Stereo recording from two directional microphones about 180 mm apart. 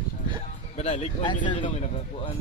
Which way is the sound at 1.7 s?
35° left (ahead or behind).